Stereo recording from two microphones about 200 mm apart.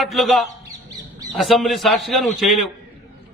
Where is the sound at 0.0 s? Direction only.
Centre (ahead or behind).